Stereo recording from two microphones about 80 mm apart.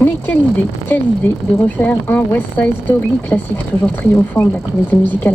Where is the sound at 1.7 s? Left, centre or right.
Left.